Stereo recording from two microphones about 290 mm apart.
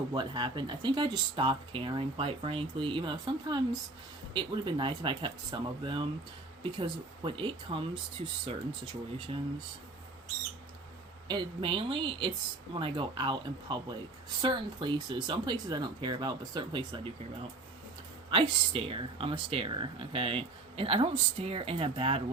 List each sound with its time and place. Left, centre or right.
0.1 s speech: centre
11.3 s speech: centre
18.3 s speech: centre